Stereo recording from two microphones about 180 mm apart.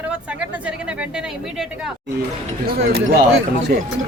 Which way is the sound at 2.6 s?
60° right (ahead or behind).